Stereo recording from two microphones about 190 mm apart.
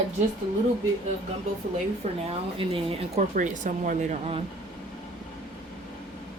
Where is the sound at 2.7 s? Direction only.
30° right (ahead or behind).